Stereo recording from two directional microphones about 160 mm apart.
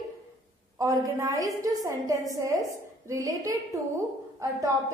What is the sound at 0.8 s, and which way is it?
A woman's voice, 20° right (ahead or behind).